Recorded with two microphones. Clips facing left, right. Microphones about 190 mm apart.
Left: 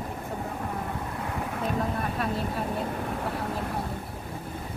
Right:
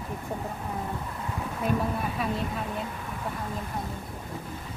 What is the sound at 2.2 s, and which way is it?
Speech, centre (ahead or behind).